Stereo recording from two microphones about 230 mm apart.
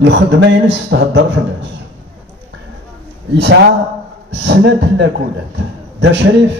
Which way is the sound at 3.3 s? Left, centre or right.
Right.